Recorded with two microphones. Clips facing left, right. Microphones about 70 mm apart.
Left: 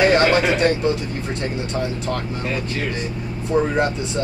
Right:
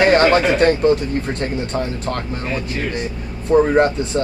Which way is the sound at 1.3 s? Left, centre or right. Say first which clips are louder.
Right 2 dB; right.